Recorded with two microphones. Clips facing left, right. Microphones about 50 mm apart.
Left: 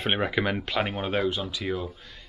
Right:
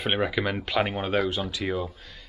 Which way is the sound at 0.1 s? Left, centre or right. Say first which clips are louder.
Even; centre.